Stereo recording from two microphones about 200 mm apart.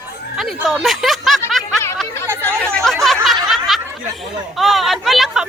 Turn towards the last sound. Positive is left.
turn(degrees=0)  # may be behind; listen again after turning